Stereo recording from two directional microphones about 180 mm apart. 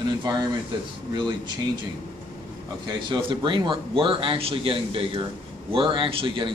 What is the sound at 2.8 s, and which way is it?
A man's voice, 25° right (ahead or behind).